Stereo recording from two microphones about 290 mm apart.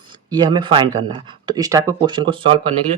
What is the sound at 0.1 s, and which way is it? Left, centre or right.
Speech, centre.